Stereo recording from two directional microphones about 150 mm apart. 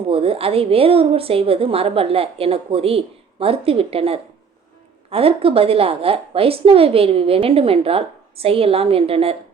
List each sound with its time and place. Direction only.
0.1 s a woman's voice: 40° right (ahead or behind)